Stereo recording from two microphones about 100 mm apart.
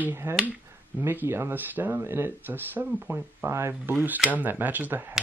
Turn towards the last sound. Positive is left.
turn(degrees=-20)  # may be behind; listen again after turning